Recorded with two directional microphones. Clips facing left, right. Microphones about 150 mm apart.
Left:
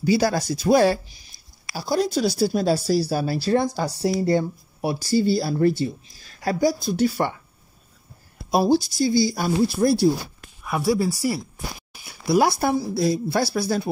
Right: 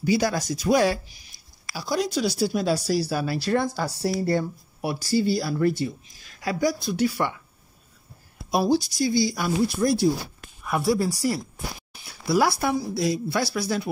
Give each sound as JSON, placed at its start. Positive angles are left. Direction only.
{"t": 0.0, "sound": "speech", "side_deg": 35}
{"t": 3.8, "sound": "speech", "side_deg": 20}
{"t": 8.5, "sound": "speech", "side_deg": 30}
{"t": 10.6, "sound": "speech", "side_deg": 0}
{"t": 11.9, "sound": "a sound", "side_deg": 10}
{"t": 12.5, "sound": "speech", "side_deg": 35}